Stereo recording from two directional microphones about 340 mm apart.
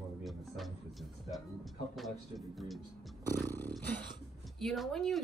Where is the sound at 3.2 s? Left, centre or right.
Centre.